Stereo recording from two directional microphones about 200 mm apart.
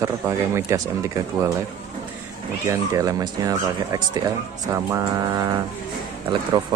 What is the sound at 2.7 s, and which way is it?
Speech, 15° right (ahead or behind).